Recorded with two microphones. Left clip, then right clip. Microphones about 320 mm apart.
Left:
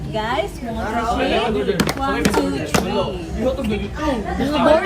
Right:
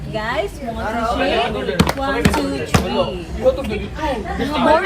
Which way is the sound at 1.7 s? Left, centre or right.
Centre.